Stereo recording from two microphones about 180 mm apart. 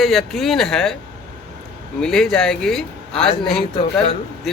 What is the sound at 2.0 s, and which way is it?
A man's voice, 5° left (ahead or behind).